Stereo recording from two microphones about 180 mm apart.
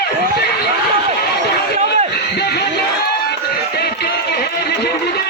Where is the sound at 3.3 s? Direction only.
65° left (ahead or behind).